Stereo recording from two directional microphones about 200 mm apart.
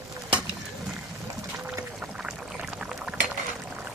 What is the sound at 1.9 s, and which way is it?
Rowboat, centre (ahead or behind).